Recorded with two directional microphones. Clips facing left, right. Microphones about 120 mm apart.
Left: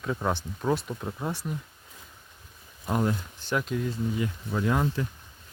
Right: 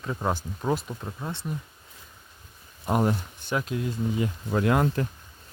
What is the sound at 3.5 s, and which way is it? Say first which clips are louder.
Speech: even; 5° right (ahead or behind).